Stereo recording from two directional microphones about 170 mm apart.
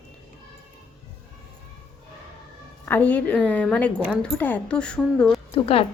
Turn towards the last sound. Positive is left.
turn(degrees=35)  # may be behind; listen again after turning